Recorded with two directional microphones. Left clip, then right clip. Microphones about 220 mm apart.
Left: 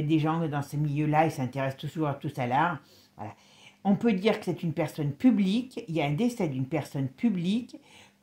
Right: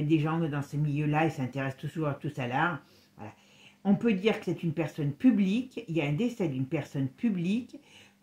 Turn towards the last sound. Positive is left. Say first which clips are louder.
# left 1 dB
turn(degrees=35)  # may be behind; listen again after turning